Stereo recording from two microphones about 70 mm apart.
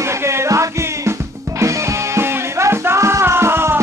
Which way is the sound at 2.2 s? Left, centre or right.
Right.